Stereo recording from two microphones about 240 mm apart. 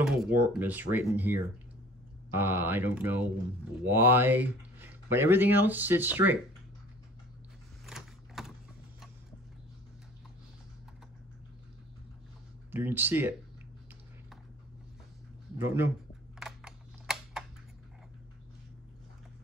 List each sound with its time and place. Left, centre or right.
0.0 s speech: centre
7.8 s a sound: centre
12.7 s speech: centre
15.5 s speech: centre
16.3 s typing: centre